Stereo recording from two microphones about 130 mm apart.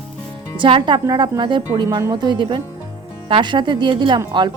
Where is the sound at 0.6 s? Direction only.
40° right (ahead or behind).